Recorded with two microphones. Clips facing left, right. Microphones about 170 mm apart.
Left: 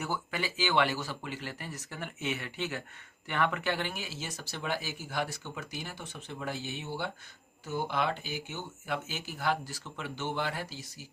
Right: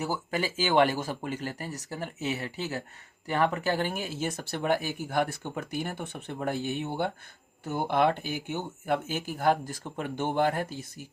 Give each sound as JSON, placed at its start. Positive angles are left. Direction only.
{"t": 0.0, "sound": "speech", "side_deg": -40}